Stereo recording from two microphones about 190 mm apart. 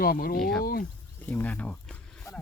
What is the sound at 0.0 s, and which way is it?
Speech, 50° left (ahead or behind).